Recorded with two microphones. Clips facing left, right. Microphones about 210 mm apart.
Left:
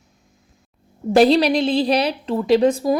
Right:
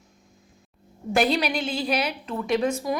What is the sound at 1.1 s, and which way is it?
A woman's voice, 35° left (ahead or behind).